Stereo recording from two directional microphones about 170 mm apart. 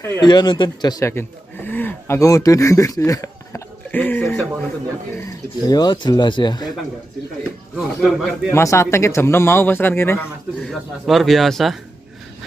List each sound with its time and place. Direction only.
0.2 s speech: 25° left (ahead or behind); by 4.6 s 10° left (ahead or behind)
5.7 s speech: 25° left (ahead or behind)
7.7 s speech: centre (ahead or behind)
8.5 s speech: 15° left (ahead or behind)
10.7 s speech: centre (ahead or behind)